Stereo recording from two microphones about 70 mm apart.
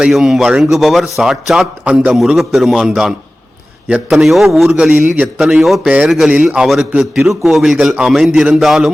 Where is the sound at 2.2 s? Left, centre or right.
Centre.